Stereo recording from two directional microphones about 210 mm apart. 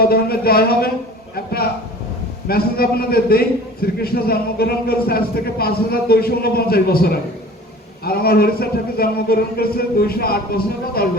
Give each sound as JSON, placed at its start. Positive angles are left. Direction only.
{"t": 0.0, "sound": "a man's voice", "side_deg": 45}
{"t": 2.5, "sound": "a man's voice", "side_deg": 45}